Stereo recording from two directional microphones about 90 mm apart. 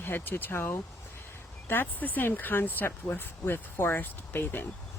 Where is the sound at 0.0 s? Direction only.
25° left (ahead or behind).